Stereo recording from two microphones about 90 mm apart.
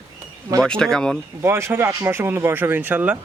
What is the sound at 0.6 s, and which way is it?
Speech, 5° left (ahead or behind).